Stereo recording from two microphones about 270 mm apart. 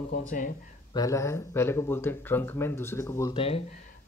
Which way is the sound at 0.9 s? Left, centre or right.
Centre.